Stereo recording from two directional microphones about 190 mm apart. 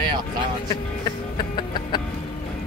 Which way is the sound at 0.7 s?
25° left (ahead or behind).